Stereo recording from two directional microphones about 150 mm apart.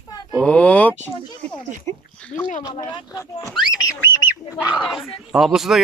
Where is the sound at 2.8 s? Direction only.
25° left (ahead or behind).